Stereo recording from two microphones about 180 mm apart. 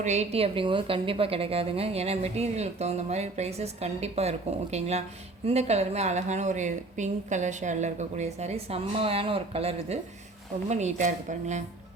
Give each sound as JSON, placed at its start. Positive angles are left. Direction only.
{"t": 0.0, "sound": "a woman's voice", "side_deg": -40}